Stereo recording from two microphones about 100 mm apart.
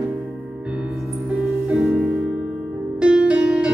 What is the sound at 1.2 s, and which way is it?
Music, 10° right (ahead or behind).